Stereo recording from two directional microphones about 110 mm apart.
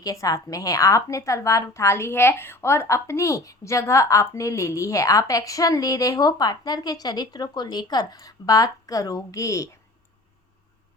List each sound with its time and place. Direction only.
0.0 s a woman's voice: 30° left (ahead or behind)